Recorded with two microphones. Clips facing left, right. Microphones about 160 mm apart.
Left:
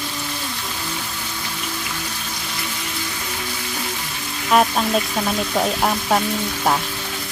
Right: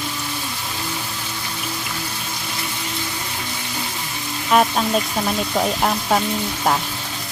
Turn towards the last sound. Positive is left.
turn(degrees=0)  # may be behind; listen again after turning